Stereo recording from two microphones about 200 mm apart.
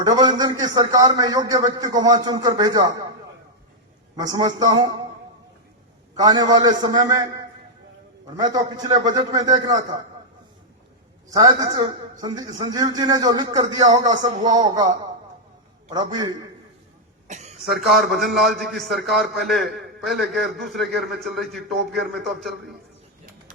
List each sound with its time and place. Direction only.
0.0 s a man's voice: 20° right (ahead or behind)
4.3 s a man's voice: 20° right (ahead or behind)
6.1 s a man's voice: 20° right (ahead or behind)
8.4 s a man's voice: 20° right (ahead or behind)
11.3 s a man's voice: 20° right (ahead or behind)
17.2 s throat clearing: 35° right (ahead or behind)
17.7 s a man's voice: centre (ahead or behind)
21.7 s a man's voice: 55° right (ahead or behind)
22.0 s a man's voice: centre (ahead or behind)